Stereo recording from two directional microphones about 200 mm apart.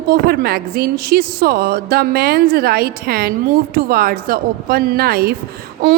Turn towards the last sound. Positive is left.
turn(degrees=-50)  # may be behind; listen again after turning